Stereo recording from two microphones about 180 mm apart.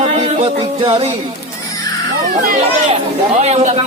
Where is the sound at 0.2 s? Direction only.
35° right (ahead or behind).